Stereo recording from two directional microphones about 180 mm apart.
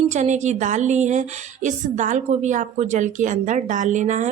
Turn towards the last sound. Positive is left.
turn(degrees=-40)  # may be behind; listen again after turning